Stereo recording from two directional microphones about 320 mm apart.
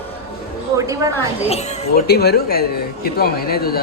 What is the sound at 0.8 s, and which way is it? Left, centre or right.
Speech, centre.